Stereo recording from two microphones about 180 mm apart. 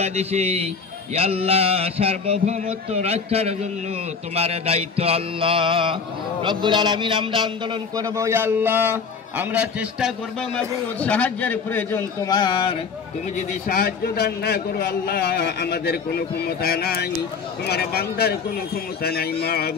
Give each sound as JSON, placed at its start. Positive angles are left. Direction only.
{"t": 0.0, "sound": "a sound", "side_deg": -35}
{"t": 6.4, "sound": "a man's voice", "side_deg": -25}
{"t": 12.3, "sound": "speech", "side_deg": 25}
{"t": 13.4, "sound": "a man's voice", "side_deg": 50}